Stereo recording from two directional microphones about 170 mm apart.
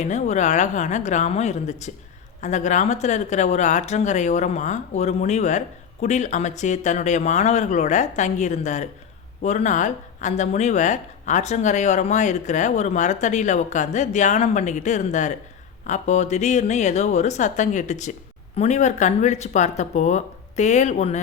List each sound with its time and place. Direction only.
0.0 s speech: 45° left (ahead or behind)